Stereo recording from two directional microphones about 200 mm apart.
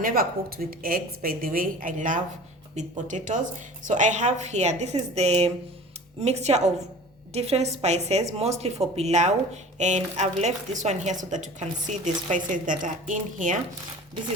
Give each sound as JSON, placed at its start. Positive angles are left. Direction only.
{"t": 0.0, "sound": "a woman's voice", "side_deg": -45}